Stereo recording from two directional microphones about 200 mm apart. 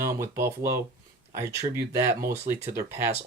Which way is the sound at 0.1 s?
15° right (ahead or behind).